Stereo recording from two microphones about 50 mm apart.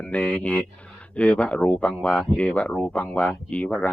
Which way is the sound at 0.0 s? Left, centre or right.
Left.